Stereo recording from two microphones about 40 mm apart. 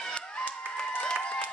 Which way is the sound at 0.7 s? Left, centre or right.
Left.